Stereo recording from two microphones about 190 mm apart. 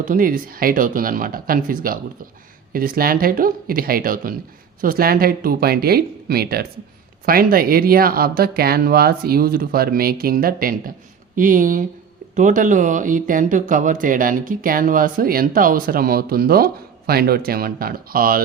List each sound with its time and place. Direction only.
0.0 s speech: 45° right (ahead or behind)